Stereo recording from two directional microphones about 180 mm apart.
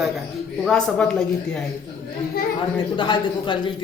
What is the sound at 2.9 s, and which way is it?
Speech, 25° left (ahead or behind).